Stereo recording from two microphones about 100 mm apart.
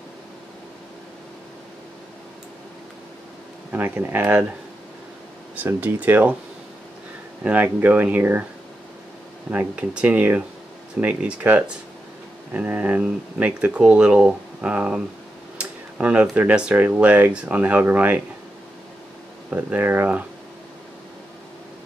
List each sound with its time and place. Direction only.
3.7 s speech: 20° right (ahead or behind)
5.6 s speech: 20° right (ahead or behind)
7.4 s speech: 15° right (ahead or behind)
9.5 s speech: 15° right (ahead or behind)
19.5 s speech: 15° right (ahead or behind)